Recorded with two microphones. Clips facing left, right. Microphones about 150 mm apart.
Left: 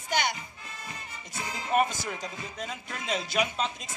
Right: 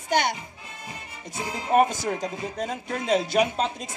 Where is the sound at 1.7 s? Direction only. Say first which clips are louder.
Right 6 dB; 40° right (ahead or behind).